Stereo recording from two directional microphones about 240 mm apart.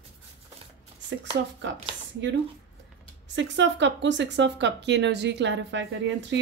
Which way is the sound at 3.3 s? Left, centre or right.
Right.